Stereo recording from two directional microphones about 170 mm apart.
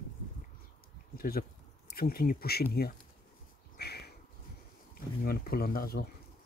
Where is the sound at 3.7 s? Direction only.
70° left (ahead or behind).